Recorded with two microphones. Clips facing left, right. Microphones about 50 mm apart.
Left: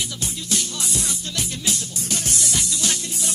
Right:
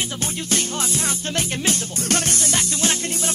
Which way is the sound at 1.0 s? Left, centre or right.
Right.